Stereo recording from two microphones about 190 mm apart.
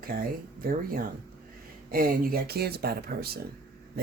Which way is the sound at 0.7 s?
50° right (ahead or behind).